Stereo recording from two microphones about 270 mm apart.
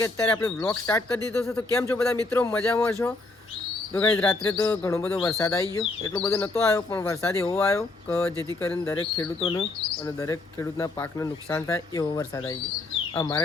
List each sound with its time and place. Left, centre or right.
0.0 s speech: centre
3.9 s speech: centre